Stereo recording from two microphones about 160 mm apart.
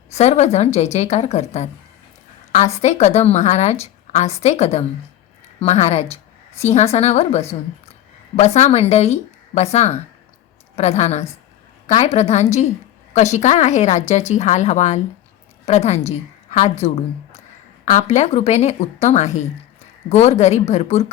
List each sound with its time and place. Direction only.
0.1 s a woman's voice: 45° left (ahead or behind)
2.8 s a woman's voice: 45° left (ahead or behind)